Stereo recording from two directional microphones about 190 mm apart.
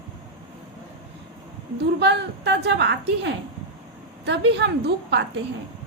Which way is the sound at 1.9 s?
65° right (ahead or behind).